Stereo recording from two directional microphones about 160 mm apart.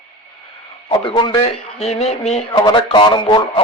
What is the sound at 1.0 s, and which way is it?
Speech, 30° left (ahead or behind).